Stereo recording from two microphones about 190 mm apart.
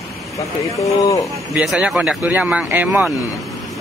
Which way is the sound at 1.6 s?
5° right (ahead or behind).